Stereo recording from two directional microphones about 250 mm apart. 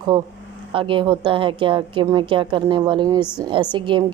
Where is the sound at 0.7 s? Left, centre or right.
Centre.